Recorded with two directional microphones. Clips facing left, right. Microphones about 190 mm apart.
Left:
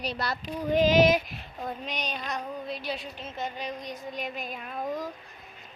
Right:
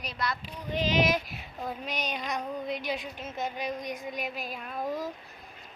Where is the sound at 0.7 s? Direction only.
45° left (ahead or behind).